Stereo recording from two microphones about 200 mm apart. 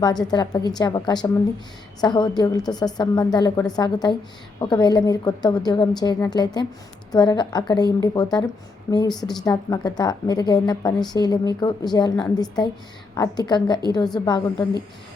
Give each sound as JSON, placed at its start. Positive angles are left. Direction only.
{"t": 0.0, "sound": "a woman's voice", "side_deg": 20}